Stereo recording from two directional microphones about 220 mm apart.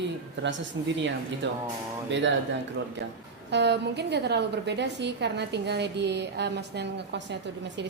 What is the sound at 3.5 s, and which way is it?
A woman's voice, 50° right (ahead or behind).